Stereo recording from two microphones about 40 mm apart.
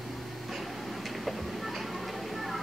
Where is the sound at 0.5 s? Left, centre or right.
Centre.